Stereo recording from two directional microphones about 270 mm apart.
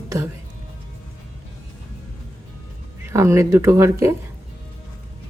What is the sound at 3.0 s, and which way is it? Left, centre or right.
Speech, centre.